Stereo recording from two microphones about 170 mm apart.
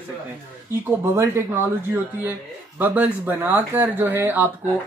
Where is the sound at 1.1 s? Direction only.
15° right (ahead or behind).